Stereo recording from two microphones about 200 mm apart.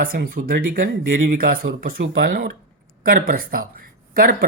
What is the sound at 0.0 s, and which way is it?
Speech, 45° right (ahead or behind).